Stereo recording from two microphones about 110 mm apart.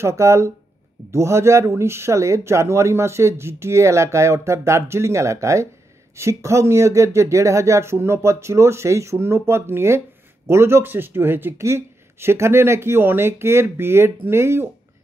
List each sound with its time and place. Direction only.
0.0 s speech: 25° right (ahead or behind)